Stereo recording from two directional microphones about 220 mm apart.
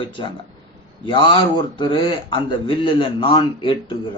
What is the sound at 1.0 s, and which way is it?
A man's voice, 20° left (ahead or behind).